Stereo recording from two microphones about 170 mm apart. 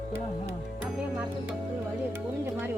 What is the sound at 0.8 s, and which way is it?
Music, 5° right (ahead or behind).